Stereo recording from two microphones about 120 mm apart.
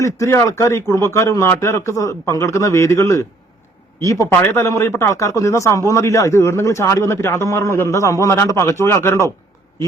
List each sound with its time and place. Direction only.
0.0 s speech: 25° left (ahead or behind)